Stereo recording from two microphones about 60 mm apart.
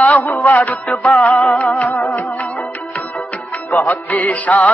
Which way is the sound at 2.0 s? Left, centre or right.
Left.